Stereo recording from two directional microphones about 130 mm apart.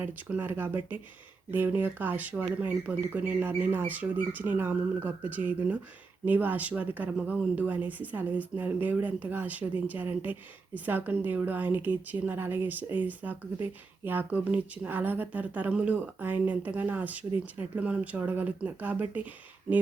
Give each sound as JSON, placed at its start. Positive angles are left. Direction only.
{"t": 0.0, "sound": "a woman's voice", "side_deg": -15}